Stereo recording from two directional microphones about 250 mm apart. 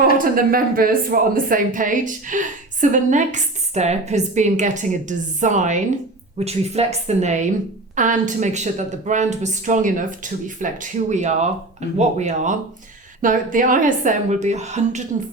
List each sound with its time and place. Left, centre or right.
0.2 s a woman's voice: right